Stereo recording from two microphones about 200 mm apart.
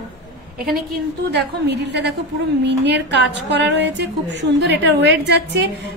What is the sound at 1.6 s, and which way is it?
A woman's voice, 60° right (ahead or behind).